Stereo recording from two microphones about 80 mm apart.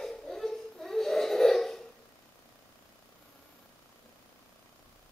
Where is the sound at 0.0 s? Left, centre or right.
Centre.